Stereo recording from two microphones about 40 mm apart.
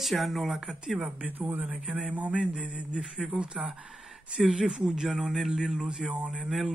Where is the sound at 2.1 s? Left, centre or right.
Right.